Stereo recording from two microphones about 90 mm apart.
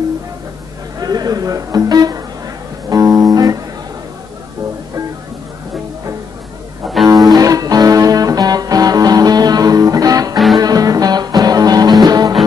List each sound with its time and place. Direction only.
0.9 s music: 45° right (ahead or behind)
7.2 s music: 45° right (ahead or behind)